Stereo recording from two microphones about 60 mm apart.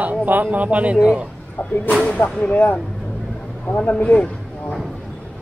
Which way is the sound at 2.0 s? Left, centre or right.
Left.